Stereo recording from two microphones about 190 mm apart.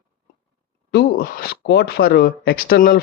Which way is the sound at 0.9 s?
50° left (ahead or behind).